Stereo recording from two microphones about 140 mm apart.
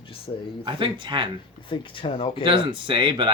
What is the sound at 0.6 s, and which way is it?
Speech, 35° right (ahead or behind).